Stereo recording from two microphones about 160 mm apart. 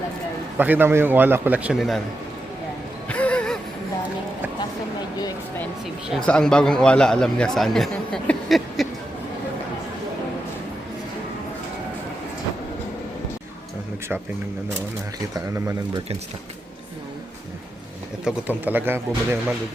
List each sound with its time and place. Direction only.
0.5 s a man's voice: 10° right (ahead or behind)
3.1 s music: 10° left (ahead or behind)
6.1 s speech: 5° left (ahead or behind)
15.4 s speech: 20° right (ahead or behind)
18.3 s a man's voice: 10° right (ahead or behind)